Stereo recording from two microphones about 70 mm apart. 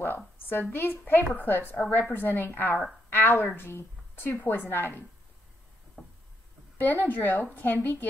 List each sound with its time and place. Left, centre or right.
0.5 s a woman's voice: left
6.8 s a woman's voice: left